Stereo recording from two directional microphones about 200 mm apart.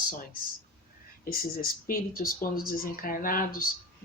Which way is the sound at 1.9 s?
45° left (ahead or behind).